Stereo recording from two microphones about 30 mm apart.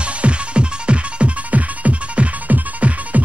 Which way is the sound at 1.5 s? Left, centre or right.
Right.